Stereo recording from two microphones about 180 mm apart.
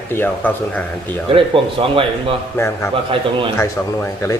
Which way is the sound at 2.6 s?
15° left (ahead or behind).